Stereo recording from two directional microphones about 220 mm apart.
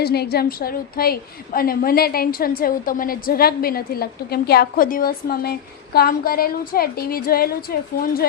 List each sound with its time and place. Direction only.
0.0 s a woman's voice: 45° left (ahead or behind)